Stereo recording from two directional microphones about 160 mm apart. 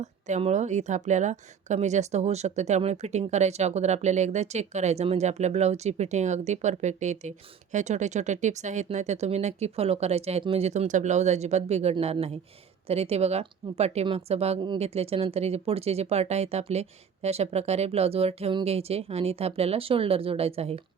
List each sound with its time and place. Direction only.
0.0 s a woman's voice: 45° right (ahead or behind)